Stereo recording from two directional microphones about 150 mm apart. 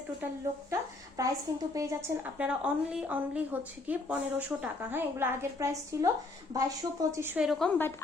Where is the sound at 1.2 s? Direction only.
20° right (ahead or behind).